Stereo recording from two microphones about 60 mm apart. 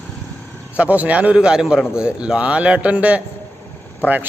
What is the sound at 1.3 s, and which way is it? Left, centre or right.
A man's voice, centre.